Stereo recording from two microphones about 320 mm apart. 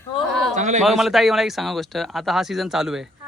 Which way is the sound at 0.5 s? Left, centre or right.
Right.